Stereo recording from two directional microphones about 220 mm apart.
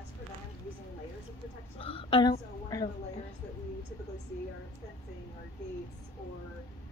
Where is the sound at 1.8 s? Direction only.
25° left (ahead or behind).